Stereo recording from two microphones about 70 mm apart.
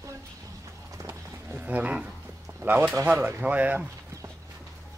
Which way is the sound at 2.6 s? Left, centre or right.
Centre.